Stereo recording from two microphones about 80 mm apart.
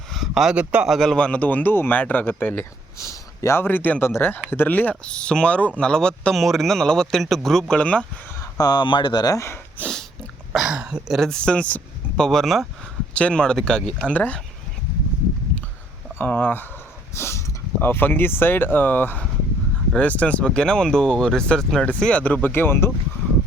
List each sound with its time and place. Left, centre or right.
0.1 s a sound: centre
0.5 s a man's voice: centre
0.9 s speech: centre
1.2 s speech: centre
3.0 s a sound: left
3.6 s speech: left; by 7.8 s centre
7.8 s speech: centre
8.5 s speech: left
9.3 s speech: left
9.8 s dog: centre
10.5 s speech: centre
11.1 s speech: centre
13.1 s speech: centre
16.1 s speech: left